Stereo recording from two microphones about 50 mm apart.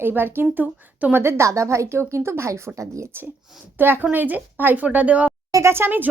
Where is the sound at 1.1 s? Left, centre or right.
Right.